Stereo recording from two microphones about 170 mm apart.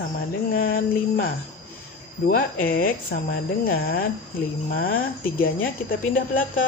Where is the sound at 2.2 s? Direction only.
55° left (ahead or behind).